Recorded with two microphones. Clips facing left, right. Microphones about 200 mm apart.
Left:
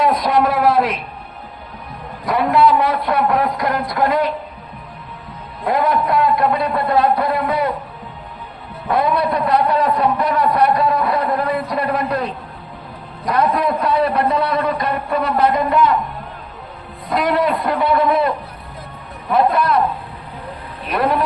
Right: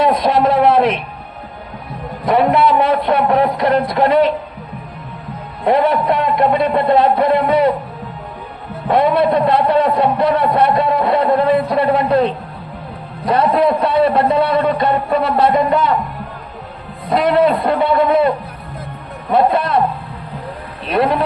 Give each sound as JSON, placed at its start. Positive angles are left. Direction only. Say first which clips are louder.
{"t": 0.0, "sound": "a sound", "louder": "right 2 dB", "side_deg": -25}
{"t": 2.2, "sound": "a man's voice", "louder": "right 2 dB", "side_deg": -25}
{"t": 5.6, "sound": "a man's voice", "louder": "right 4 dB", "side_deg": -25}
{"t": 8.9, "sound": "a man's voice", "louder": "right 4 dB", "side_deg": -25}
{"t": 17.1, "sound": "a man's voice", "louder": "right 4 dB", "side_deg": -25}
{"t": 20.9, "sound": "a man's voice", "louder": "right 3 dB", "side_deg": -25}